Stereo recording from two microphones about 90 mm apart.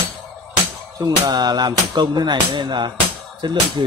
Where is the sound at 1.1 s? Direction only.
50° right (ahead or behind).